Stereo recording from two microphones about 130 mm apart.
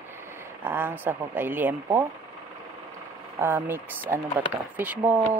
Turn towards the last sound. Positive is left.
turn(degrees=-15)  # may be behind; listen again after turning